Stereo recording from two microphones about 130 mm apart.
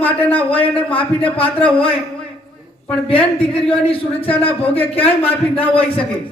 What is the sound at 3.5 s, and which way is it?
Speech, 45° left (ahead or behind).